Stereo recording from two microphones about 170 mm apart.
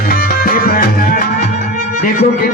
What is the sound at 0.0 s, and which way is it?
Music, 60° left (ahead or behind).